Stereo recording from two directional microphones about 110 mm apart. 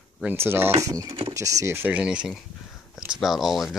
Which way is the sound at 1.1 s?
55° right (ahead or behind).